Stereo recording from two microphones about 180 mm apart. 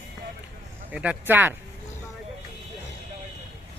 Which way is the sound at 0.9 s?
5° right (ahead or behind).